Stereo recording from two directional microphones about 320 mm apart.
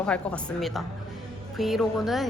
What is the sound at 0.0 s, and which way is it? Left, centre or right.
A woman's voice, centre.